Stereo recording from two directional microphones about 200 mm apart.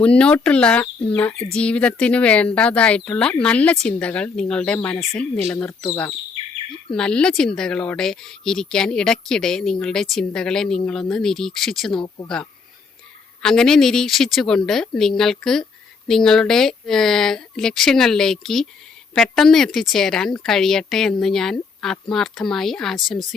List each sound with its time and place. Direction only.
0.0 s speech: 5° left (ahead or behind)
12.0 s speech: 20° left (ahead or behind)
13.4 s speech: 5° left (ahead or behind)